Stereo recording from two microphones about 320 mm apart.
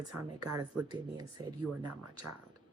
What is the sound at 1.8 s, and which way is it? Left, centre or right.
Speech, right.